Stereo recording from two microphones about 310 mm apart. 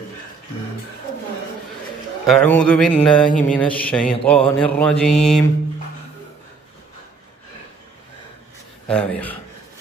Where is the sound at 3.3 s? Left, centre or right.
Left.